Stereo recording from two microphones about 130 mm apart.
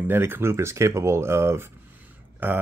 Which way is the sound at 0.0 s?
15° right (ahead or behind).